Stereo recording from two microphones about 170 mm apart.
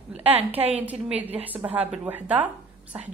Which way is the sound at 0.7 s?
10° right (ahead or behind).